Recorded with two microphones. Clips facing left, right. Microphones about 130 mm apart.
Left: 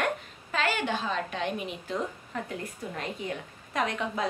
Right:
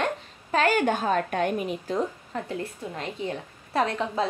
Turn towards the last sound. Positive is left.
turn(degrees=-30)  # may be behind; listen again after turning